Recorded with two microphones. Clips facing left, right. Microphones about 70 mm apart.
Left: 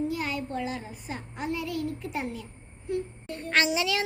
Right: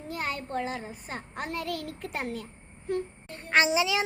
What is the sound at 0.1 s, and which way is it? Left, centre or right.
A child's voice, right.